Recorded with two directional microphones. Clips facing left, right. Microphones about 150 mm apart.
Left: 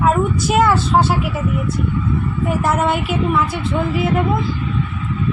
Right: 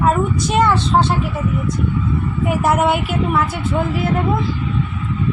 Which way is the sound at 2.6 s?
10° right (ahead or behind).